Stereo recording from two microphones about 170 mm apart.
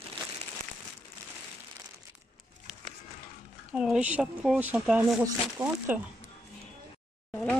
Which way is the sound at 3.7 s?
5° right (ahead or behind).